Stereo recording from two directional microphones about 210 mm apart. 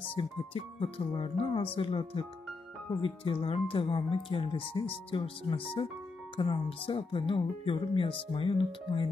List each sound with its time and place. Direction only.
0.1 s speech: 25° left (ahead or behind)